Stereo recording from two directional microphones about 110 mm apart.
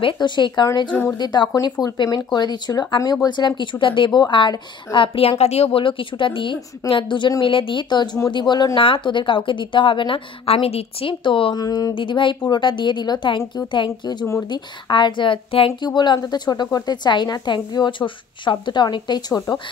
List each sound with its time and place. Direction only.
0.0 s speech: 45° left (ahead or behind)
5.4 s speech: 70° left (ahead or behind); by 11.5 s 50° left (ahead or behind)
11.5 s speech: 35° left (ahead or behind)
11.9 s speech: 50° left (ahead or behind)